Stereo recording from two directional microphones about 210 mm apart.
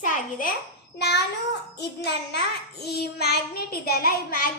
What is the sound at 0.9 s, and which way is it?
Child singing, 50° left (ahead or behind).